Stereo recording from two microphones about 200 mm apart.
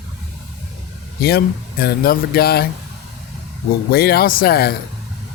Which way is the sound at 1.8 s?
50° left (ahead or behind).